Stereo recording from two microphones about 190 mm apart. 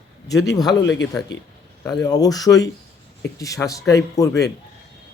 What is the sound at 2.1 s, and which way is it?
Speech, 20° left (ahead or behind).